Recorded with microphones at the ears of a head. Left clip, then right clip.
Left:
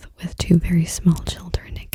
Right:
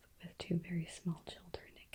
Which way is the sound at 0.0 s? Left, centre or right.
Left.